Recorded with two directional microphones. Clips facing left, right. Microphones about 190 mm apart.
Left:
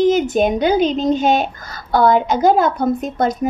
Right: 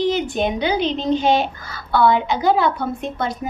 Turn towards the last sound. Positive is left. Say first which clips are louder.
# left 6 dB
turn(degrees=45)  # may be behind; listen again after turning